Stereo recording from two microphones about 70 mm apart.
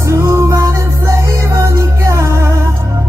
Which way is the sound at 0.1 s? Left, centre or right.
Right.